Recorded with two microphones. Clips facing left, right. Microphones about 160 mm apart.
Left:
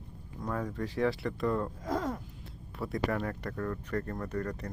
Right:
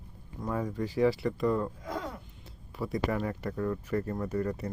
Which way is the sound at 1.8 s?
45° left (ahead or behind).